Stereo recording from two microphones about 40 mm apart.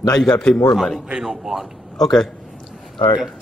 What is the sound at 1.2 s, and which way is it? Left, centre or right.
Speech, centre.